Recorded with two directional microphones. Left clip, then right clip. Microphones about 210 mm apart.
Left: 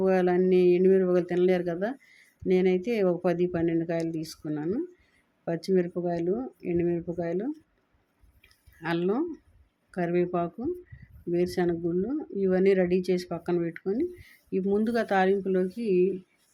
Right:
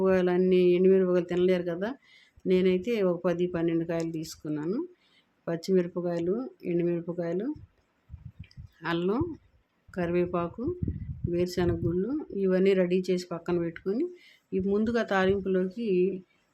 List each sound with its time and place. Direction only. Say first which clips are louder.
0.0 s speech: left 1 dB; centre (ahead or behind)
8.4 s a sound: even; centre (ahead or behind)
9.9 s speech: left 1 dB; centre (ahead or behind)